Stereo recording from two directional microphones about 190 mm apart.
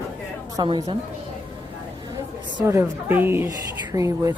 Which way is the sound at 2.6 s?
15° right (ahead or behind).